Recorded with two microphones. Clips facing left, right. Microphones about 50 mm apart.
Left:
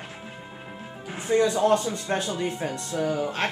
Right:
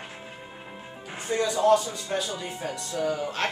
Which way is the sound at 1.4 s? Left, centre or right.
Left.